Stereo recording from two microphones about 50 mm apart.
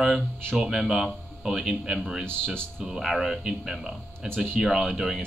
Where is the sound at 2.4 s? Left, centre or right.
Centre.